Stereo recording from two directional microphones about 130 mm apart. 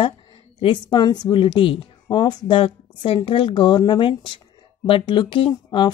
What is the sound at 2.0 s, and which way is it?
A woman's voice, 30° left (ahead or behind).